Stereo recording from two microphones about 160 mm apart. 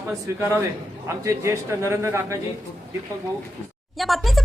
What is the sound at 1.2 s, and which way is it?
A man's voice, 20° right (ahead or behind).